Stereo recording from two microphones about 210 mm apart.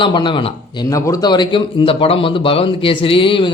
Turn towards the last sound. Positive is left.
turn(degrees=25)  # may be behind; listen again after turning